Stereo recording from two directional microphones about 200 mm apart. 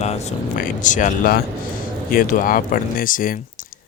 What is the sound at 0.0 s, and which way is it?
Speech, 35° left (ahead or behind).